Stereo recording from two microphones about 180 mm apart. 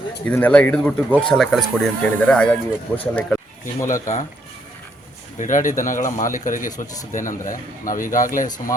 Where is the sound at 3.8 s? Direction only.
45° left (ahead or behind).